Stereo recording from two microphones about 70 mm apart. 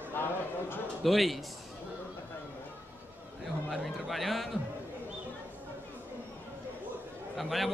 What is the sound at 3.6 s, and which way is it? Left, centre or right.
Speech, centre.